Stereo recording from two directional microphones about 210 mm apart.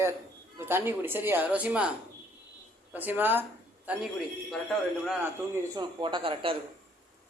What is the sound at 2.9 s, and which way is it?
Speech, 10° right (ahead or behind).